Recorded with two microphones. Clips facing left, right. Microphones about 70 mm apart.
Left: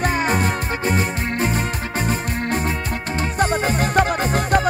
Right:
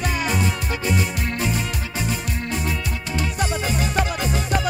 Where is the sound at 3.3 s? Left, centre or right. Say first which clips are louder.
Left 7 dB; left.